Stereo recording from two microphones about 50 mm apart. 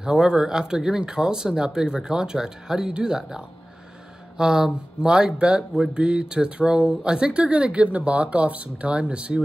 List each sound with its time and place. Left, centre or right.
0.0 s speech: centre